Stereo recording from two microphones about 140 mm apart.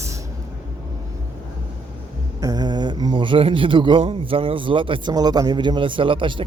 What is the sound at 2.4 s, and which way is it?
Speech, 30° right (ahead or behind).